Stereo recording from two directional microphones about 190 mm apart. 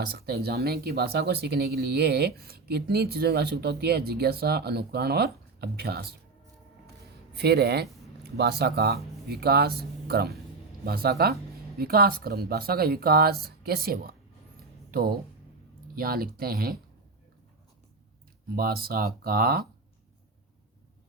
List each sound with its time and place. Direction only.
0.1 s speech: 55° right (ahead or behind)
7.3 s speech: 60° right (ahead or behind)
14.8 s a sound: 50° right (ahead or behind)
16.0 s speech: 50° right (ahead or behind)
18.5 s speech: 50° right (ahead or behind)